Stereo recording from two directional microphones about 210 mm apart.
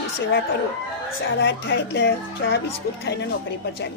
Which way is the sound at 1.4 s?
60° left (ahead or behind).